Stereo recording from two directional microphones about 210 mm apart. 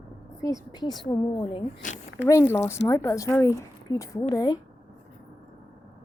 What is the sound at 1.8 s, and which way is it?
Speech, 40° left (ahead or behind).